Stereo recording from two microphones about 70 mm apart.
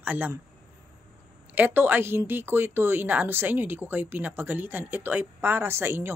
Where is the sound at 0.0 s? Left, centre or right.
Right.